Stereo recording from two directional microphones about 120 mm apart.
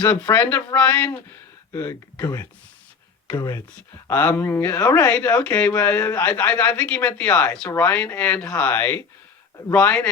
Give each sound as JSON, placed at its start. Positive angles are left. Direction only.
{"t": 0.0, "sound": "speech", "side_deg": 10}
{"t": 3.8, "sound": "speech", "side_deg": 15}
{"t": 5.0, "sound": "speech", "side_deg": 10}